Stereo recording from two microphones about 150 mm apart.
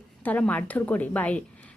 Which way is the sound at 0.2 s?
10° left (ahead or behind).